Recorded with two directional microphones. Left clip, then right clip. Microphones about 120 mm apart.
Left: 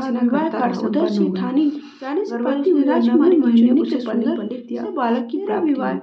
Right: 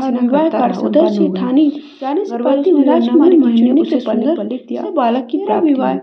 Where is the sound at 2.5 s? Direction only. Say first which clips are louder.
Right 6 dB; 30° right (ahead or behind).